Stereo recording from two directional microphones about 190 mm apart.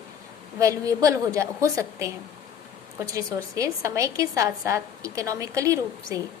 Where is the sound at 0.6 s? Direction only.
15° right (ahead or behind).